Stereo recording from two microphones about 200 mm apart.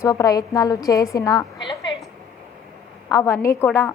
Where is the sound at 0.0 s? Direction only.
15° left (ahead or behind).